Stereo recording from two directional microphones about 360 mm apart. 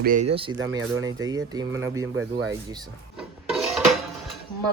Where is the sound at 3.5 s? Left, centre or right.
Centre.